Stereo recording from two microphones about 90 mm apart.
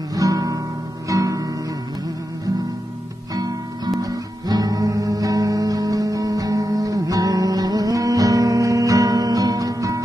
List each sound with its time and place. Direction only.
0.1 s guitar: 40° right (ahead or behind)
1.0 s music: 40° right (ahead or behind)
3.3 s music: 45° right (ahead or behind)